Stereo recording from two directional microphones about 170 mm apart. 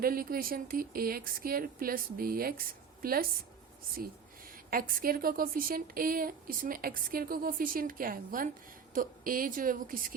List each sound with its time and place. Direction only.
0.0 s a woman's voice: 60° right (ahead or behind)
4.7 s a woman's voice: 60° right (ahead or behind)